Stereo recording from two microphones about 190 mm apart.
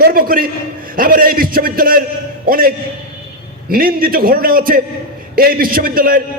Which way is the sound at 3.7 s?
50° right (ahead or behind).